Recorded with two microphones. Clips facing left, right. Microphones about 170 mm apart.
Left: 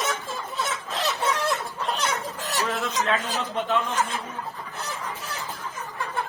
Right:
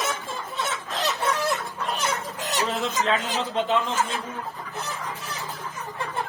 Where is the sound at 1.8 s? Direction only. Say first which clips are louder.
Even; centre (ahead or behind).